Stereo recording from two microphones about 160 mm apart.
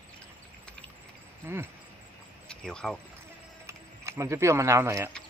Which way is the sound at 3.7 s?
15° right (ahead or behind).